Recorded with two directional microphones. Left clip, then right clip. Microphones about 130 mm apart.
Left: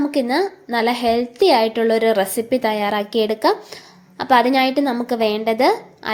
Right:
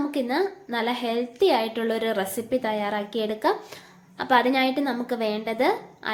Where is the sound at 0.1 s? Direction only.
45° left (ahead or behind).